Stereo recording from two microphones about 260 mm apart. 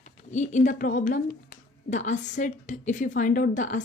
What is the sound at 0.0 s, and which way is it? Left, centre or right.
Speech, left.